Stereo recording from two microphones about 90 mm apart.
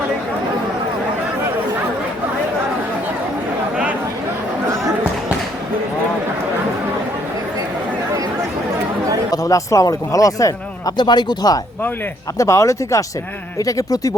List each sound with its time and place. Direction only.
9.3 s speech: 40° left (ahead or behind)
12.4 s speech: 35° left (ahead or behind)